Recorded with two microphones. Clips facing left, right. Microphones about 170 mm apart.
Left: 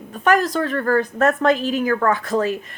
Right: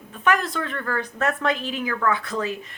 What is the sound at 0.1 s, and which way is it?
Speech, 40° left (ahead or behind).